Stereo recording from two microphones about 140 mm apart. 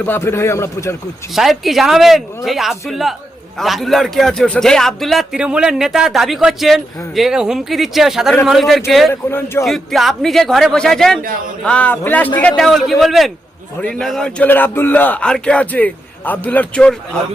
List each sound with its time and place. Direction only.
0.0 s a man's voice: 15° left (ahead or behind)
1.3 s a man's voice: centre (ahead or behind)
9.3 s speech: 15° left (ahead or behind)
9.6 s a man's voice: centre (ahead or behind)